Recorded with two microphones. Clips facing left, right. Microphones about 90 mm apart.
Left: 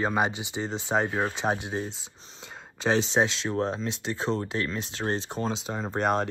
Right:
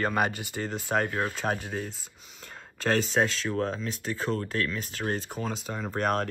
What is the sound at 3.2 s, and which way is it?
Speech, 20° left (ahead or behind).